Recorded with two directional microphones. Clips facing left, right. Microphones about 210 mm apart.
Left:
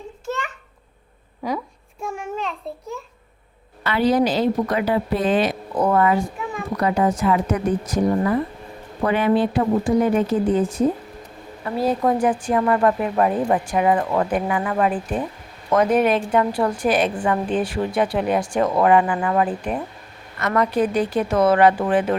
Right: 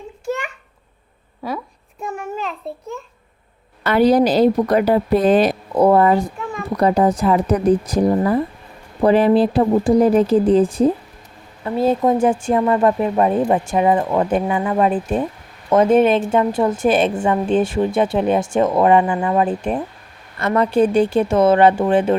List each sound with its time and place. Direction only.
0.3 s babbling: 15° right (ahead or behind)
1.5 s babbling: centre (ahead or behind)
3.8 s a woman's voice: 40° right (ahead or behind); by 22.1 s 25° right (ahead or behind)